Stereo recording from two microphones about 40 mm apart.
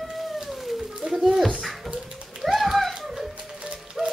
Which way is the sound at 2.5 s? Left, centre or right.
Centre.